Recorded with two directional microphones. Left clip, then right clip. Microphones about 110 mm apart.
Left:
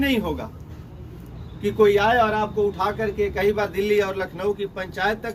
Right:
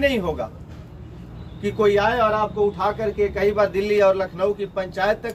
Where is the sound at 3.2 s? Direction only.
20° right (ahead or behind).